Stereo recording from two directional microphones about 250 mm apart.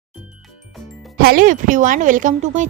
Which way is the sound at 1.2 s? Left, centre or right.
Right.